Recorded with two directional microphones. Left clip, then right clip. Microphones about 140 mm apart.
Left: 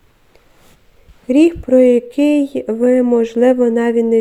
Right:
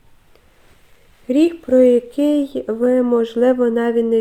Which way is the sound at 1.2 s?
30° left (ahead or behind).